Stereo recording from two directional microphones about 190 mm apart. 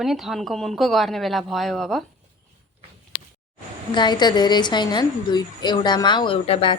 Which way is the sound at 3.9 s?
25° left (ahead or behind).